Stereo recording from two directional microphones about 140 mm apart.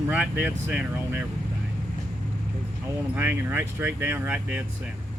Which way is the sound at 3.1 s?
15° right (ahead or behind).